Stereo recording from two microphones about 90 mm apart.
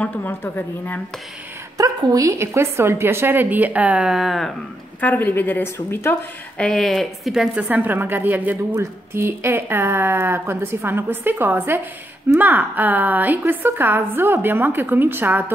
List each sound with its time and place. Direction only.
0.0 s a woman's voice: 20° left (ahead or behind)
1.8 s a woman's voice: 40° right (ahead or behind); by 4.6 s centre (ahead or behind)
5.0 s a woman's voice: 20° left (ahead or behind)
6.6 s a woman's voice: 5° left (ahead or behind)
7.5 s a woman's voice: 20° right (ahead or behind)